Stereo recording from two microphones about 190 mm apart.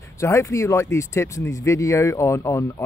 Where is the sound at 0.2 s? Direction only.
15° left (ahead or behind).